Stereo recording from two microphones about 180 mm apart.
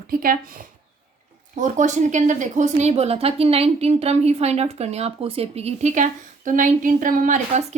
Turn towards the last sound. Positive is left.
turn(degrees=-40)  # may be behind; listen again after turning